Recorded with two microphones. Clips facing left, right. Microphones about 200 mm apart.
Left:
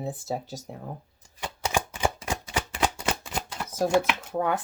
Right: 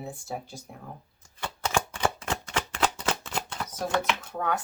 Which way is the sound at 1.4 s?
15° left (ahead or behind).